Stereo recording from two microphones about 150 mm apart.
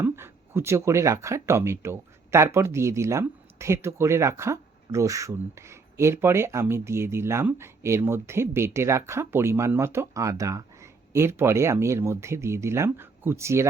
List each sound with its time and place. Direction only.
0.0 s speech: 15° right (ahead or behind)